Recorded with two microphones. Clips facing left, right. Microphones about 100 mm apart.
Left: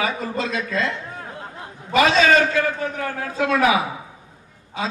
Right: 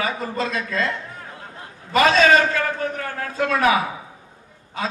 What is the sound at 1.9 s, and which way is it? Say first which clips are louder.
A man's voice: right 1 dB; 45° right (ahead or behind).